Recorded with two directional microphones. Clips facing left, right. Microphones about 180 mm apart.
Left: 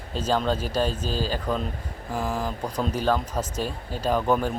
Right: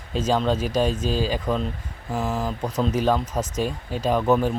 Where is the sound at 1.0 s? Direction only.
40° left (ahead or behind).